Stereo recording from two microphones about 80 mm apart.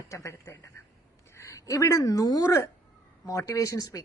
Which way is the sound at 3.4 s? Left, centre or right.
Left.